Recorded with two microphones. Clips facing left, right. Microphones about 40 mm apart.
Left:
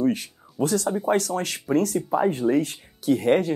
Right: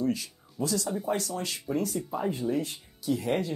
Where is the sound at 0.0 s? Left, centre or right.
Left.